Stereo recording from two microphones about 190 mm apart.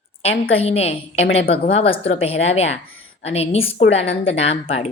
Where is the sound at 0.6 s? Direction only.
30° left (ahead or behind).